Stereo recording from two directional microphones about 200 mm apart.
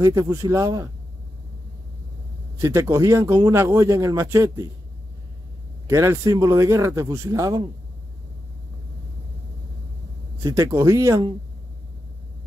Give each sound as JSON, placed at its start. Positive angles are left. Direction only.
{"t": 0.0, "sound": "speech", "side_deg": -15}
{"t": 2.5, "sound": "speech", "side_deg": -15}
{"t": 5.9, "sound": "speech", "side_deg": -15}
{"t": 10.4, "sound": "speech", "side_deg": -15}